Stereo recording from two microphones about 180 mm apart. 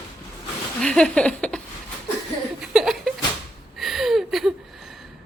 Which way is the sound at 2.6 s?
Centre (ahead or behind).